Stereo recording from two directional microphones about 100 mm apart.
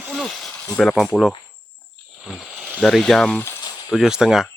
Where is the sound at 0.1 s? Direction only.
Centre (ahead or behind).